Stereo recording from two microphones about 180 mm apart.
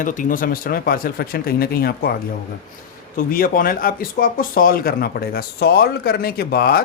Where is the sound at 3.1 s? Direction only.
55° left (ahead or behind).